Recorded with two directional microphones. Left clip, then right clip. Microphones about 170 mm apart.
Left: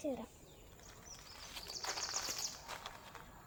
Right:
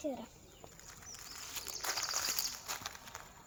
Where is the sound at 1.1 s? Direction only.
75° right (ahead or behind).